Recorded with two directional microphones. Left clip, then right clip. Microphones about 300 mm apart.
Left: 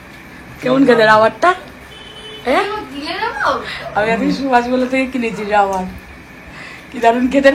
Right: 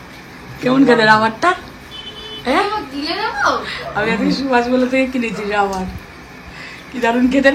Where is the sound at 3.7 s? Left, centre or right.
Centre.